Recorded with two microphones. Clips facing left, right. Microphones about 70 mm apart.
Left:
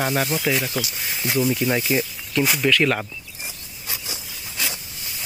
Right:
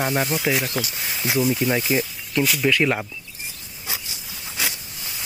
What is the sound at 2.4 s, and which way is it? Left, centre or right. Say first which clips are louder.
Speech: even; centre.